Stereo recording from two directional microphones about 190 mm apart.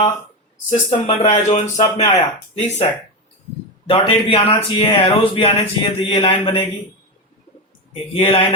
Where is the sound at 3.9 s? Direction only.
30° left (ahead or behind).